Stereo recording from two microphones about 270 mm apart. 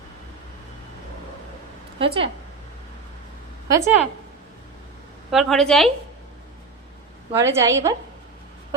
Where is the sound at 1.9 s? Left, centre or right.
Right.